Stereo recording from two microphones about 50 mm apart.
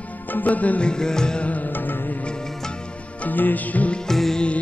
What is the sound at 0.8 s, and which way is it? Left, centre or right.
Music, centre.